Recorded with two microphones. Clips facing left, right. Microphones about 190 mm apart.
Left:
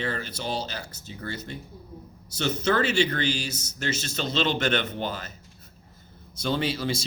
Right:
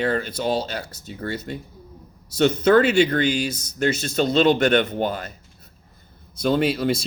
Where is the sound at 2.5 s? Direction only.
55° right (ahead or behind).